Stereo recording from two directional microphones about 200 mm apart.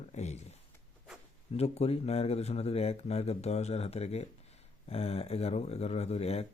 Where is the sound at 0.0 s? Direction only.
35° left (ahead or behind).